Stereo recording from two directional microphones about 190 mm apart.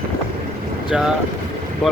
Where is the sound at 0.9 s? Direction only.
5° right (ahead or behind).